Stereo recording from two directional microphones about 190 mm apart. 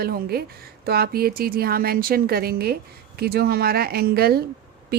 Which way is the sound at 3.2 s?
55° right (ahead or behind).